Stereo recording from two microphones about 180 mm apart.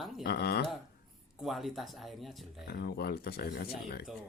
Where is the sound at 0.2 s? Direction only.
65° left (ahead or behind).